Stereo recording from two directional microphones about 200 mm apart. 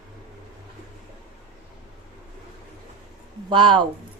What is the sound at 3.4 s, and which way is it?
Speech, 25° right (ahead or behind).